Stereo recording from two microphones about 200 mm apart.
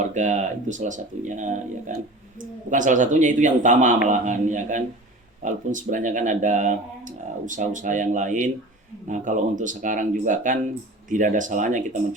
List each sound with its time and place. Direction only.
0.0 s speech: 35° right (ahead or behind)